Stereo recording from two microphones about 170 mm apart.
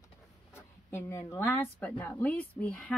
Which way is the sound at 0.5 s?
15° left (ahead or behind).